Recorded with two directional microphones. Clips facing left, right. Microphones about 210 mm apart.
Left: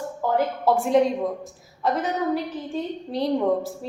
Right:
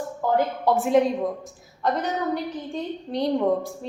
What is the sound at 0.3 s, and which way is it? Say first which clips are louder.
A woman's voice: left 1 dB; centre (ahead or behind).